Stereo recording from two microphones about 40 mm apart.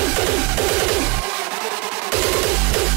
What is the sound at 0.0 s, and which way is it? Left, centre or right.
Music, centre.